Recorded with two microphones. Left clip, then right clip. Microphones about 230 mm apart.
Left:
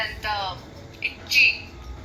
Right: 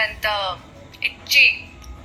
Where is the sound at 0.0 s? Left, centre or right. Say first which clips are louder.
Right 5 dB; right.